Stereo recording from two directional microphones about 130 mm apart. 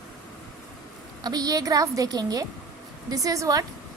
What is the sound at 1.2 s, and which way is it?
A woman's voice, 30° right (ahead or behind).